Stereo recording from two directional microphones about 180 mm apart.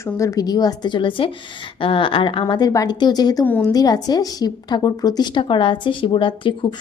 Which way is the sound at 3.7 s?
20° left (ahead or behind).